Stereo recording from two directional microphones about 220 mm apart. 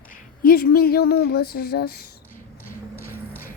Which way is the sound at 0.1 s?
40° left (ahead or behind).